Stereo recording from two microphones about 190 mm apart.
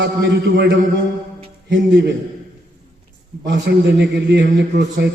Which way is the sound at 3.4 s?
60° right (ahead or behind).